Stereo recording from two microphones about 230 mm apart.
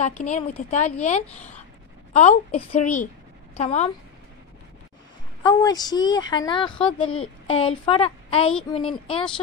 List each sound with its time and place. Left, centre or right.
0.2 s a woman's voice: left
2.1 s a woman's voice: left
5.4 s a woman's voice: centre